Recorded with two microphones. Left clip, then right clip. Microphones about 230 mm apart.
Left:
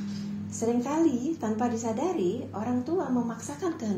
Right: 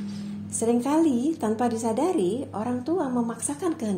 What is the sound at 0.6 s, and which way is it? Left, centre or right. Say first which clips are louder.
A woman's voice: right 4 dB; right.